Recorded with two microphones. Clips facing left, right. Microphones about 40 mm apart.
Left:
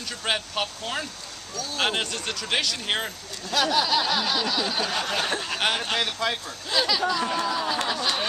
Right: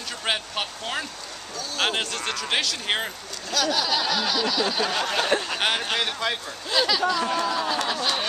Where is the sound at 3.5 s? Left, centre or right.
Centre.